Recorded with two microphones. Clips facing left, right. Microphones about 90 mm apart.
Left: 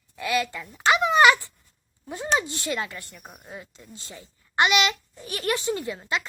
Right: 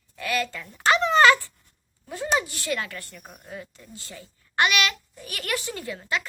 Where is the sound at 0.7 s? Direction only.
10° left (ahead or behind).